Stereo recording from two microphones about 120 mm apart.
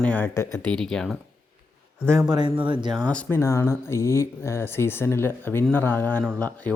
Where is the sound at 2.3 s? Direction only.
40° right (ahead or behind).